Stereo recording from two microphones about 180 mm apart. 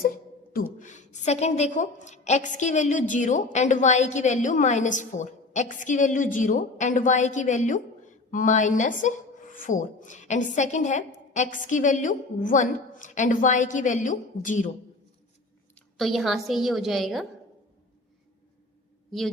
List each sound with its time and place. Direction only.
0.5 s a woman's voice: 45° left (ahead or behind)
15.7 s a woman's voice: centre (ahead or behind)